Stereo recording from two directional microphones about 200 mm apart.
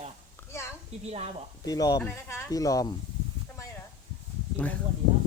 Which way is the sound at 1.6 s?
20° left (ahead or behind).